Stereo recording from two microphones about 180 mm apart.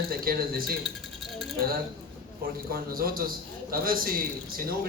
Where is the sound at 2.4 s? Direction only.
55° right (ahead or behind).